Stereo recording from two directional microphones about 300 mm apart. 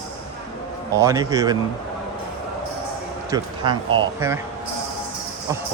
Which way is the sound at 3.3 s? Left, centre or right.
Centre.